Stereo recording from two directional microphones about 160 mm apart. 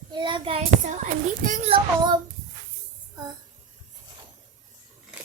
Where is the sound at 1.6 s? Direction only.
30° right (ahead or behind).